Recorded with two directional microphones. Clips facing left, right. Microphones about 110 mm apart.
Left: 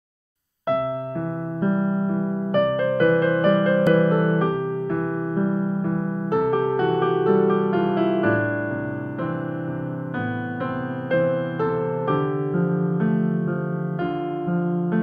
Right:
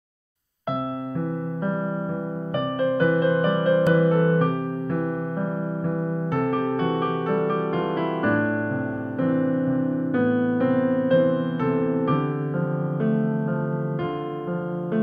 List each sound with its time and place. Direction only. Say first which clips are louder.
2.5 s music: left 3 dB; 55° left (ahead or behind)